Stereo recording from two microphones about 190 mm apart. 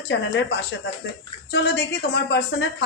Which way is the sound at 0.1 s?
65° left (ahead or behind).